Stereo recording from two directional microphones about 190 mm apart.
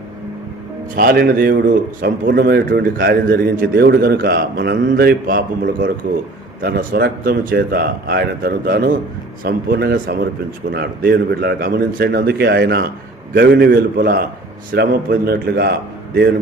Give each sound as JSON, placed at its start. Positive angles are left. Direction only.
{"t": 0.9, "sound": "a man's voice", "side_deg": -55}